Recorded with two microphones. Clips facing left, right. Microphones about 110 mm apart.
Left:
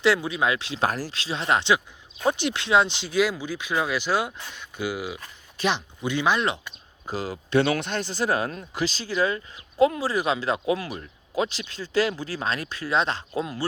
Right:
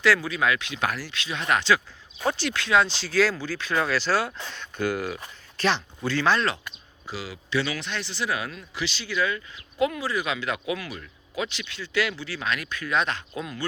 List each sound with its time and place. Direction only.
0.0 s speech: 25° left (ahead or behind)
7.1 s speech: 45° left (ahead or behind)